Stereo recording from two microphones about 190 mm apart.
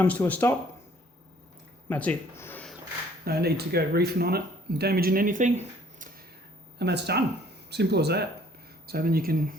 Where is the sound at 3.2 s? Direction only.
55° right (ahead or behind).